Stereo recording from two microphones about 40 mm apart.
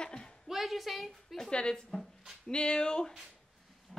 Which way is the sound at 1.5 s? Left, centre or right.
Left.